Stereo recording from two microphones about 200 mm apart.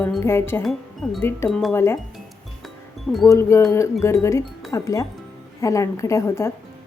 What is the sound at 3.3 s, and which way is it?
Speech, 15° left (ahead or behind).